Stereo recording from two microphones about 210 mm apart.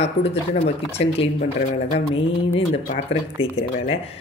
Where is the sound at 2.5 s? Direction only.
30° left (ahead or behind).